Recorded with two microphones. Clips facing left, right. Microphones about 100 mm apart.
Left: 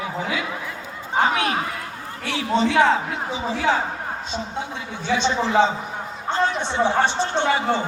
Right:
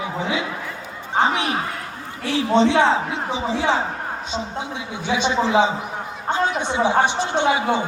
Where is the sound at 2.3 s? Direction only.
30° right (ahead or behind).